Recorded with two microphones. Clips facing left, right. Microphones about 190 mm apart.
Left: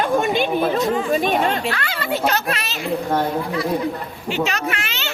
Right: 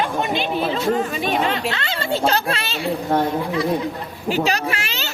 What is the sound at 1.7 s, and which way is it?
A child's voice, 25° right (ahead or behind).